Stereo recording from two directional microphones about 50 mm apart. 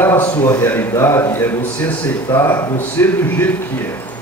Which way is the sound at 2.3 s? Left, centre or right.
Left.